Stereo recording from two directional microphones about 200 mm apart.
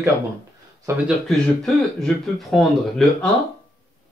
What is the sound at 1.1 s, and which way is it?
Speech, centre (ahead or behind).